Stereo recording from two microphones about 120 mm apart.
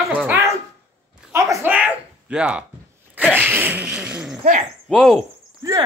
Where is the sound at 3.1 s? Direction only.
15° right (ahead or behind).